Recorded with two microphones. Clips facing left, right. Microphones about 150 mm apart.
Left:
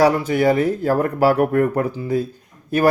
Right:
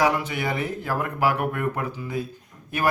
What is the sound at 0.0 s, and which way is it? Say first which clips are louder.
Speech: left 8 dB; 35° left (ahead or behind).